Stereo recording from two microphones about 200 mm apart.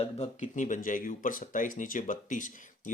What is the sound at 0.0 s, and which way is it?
Speech, 30° left (ahead or behind).